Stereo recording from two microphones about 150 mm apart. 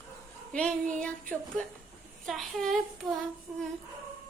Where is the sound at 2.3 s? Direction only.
Centre (ahead or behind).